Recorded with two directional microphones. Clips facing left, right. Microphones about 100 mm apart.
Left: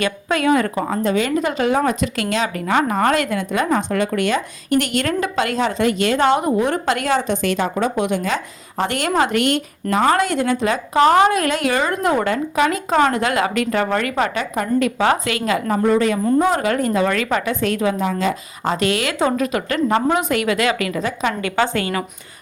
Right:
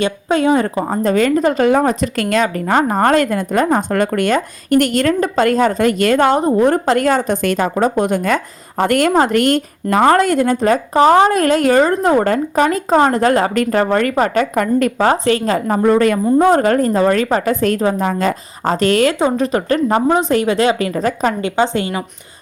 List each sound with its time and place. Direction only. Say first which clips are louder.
0.0 s a woman's voice: right 4 dB; 25° right (ahead or behind)
1.0 s a woman's voice: right 7 dB; 45° right (ahead or behind)
1.8 s a woman's voice: right 3 dB; 35° right (ahead or behind)
10.9 s a woman's voice: right 2 dB; 30° right (ahead or behind)
15.8 s a woman's voice: right 5 dB; 50° right (ahead or behind)
21.4 s a woman's voice: right 3 dB; 20° right (ahead or behind)